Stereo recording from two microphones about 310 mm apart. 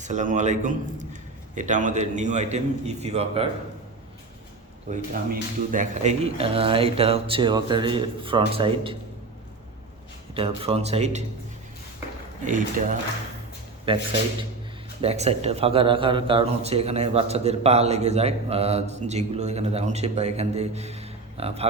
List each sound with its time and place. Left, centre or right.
0.0 s a man's voice: right
4.9 s speech: right
10.3 s a man's voice: centre
12.5 s a man's voice: right
15.0 s a man's voice: centre